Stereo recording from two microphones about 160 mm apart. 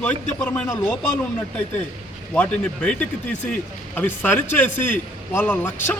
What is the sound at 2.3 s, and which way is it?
A man's voice, 5° left (ahead or behind).